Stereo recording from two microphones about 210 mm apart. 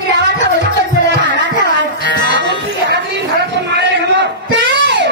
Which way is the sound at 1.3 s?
55° right (ahead or behind).